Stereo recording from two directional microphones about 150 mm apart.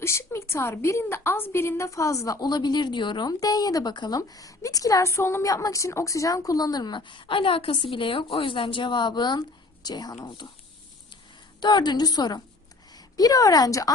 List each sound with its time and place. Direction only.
0.0 s a woman's voice: 20° left (ahead or behind)
11.6 s a woman's voice: 30° left (ahead or behind)